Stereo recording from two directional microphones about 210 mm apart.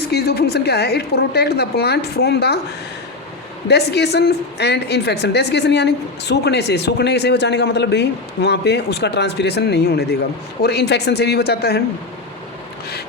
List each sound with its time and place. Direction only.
0.1 s a woman's voice: 50° left (ahead or behind)
3.7 s a woman's voice: 50° left (ahead or behind)